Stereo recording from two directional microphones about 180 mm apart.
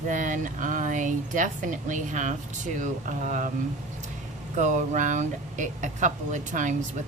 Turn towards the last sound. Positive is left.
turn(degrees=-45)  # may be behind; listen again after turning